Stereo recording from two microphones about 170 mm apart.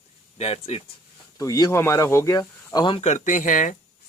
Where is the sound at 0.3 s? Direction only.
35° left (ahead or behind).